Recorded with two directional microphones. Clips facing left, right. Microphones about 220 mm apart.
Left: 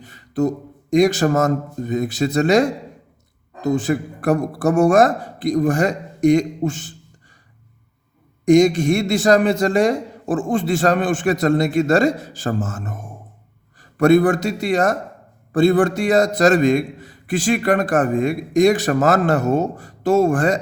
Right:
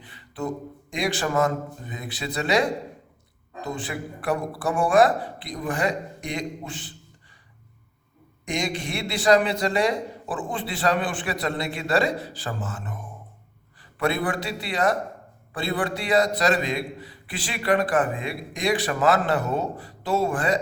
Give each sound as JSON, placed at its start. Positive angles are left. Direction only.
{"t": 0.0, "sound": "a man's voice", "side_deg": 45}
{"t": 8.4, "sound": "a man's voice", "side_deg": 45}